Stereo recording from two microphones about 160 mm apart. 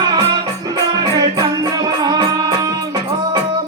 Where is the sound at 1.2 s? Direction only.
25° right (ahead or behind).